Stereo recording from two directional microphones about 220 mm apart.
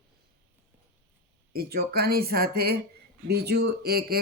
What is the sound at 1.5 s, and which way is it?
Speech, 45° right (ahead or behind).